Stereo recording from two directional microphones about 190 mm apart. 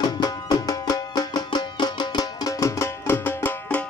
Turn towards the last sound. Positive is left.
turn(degrees=10)  # may be behind; listen again after turning